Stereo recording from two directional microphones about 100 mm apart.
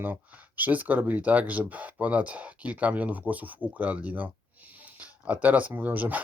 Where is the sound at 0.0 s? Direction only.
20° right (ahead or behind).